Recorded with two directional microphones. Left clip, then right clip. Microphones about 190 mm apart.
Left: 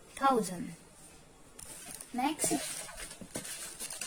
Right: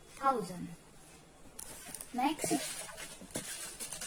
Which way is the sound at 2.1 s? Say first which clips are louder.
Even; 20° left (ahead or behind).